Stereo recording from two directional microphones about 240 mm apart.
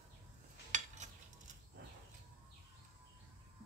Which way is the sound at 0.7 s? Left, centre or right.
Right.